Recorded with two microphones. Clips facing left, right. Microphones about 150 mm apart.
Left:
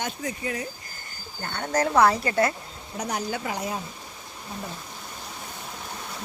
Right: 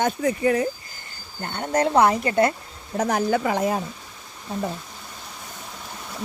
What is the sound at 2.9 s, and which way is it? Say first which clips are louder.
Speech: right 8 dB; 55° right (ahead or behind).